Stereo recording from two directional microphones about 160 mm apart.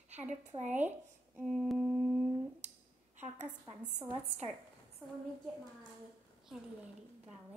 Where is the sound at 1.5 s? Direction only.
Centre (ahead or behind).